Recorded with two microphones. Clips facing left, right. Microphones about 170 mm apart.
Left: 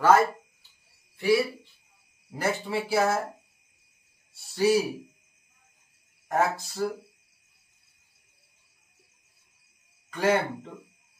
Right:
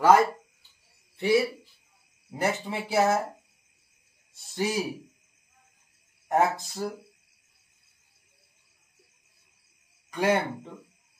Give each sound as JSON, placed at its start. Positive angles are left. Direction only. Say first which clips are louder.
{"t": 0.0, "sound": "a sound", "louder": "right 1 dB", "side_deg": -15}
{"t": 2.3, "sound": "speech", "louder": "left 1 dB", "side_deg": -20}
{"t": 4.3, "sound": "speech", "louder": "left 6 dB", "side_deg": -20}
{"t": 6.2, "sound": "speech", "louder": "right 2 dB", "side_deg": -20}
{"t": 10.1, "sound": "speech", "louder": "even", "side_deg": -15}